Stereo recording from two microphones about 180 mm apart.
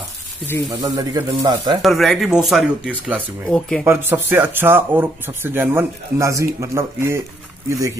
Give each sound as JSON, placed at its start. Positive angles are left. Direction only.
{"t": 0.7, "sound": "a man's voice", "side_deg": -20}
{"t": 1.8, "sound": "speech", "side_deg": 0}
{"t": 3.8, "sound": "speech", "side_deg": -15}